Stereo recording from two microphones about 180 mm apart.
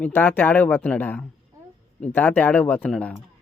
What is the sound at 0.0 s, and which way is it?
Speech, 10° left (ahead or behind).